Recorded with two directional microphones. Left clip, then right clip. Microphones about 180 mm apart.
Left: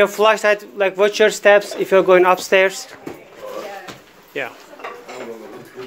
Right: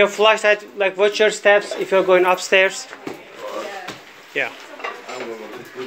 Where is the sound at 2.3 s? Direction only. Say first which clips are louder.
Left 1 dB; 30° left (ahead or behind).